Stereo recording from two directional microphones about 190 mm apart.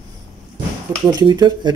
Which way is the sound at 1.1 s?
20° right (ahead or behind).